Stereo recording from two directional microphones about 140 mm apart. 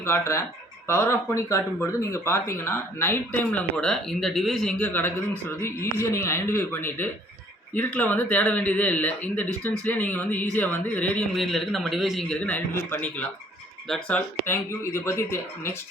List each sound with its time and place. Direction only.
0.0 s speech: 15° left (ahead or behind)
4.9 s speech: 15° left (ahead or behind)
12.5 s speech: 15° left (ahead or behind)
13.8 s speech: centre (ahead or behind)
14.4 s speech: 15° left (ahead or behind)